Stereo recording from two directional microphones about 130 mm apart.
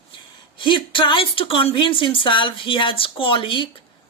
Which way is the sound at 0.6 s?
40° left (ahead or behind).